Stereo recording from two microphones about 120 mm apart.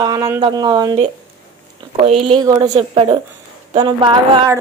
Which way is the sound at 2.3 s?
30° right (ahead or behind).